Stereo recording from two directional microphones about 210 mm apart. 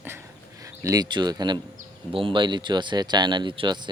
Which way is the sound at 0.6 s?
15° right (ahead or behind).